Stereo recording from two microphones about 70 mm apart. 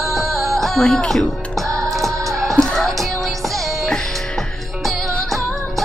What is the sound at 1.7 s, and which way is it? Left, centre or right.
Music, right.